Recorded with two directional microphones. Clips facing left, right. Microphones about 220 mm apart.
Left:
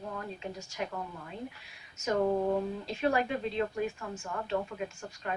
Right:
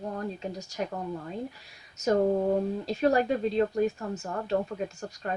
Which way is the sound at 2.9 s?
40° right (ahead or behind).